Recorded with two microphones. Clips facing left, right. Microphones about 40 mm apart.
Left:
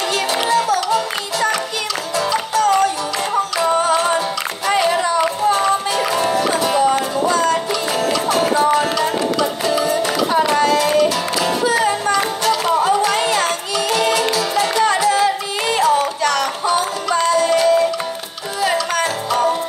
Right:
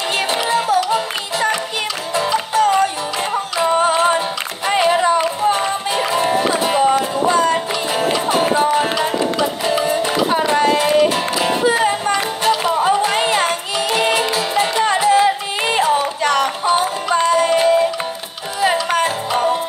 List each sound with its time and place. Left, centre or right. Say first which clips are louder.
0.5 s music: even; right
4.6 s a sound: right 2 dB; right
5.4 s music: left 1 dB; right